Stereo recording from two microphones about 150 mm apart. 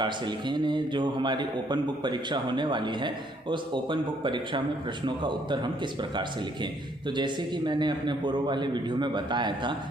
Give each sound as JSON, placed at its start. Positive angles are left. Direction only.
{"t": 0.0, "sound": "a man's voice", "side_deg": -30}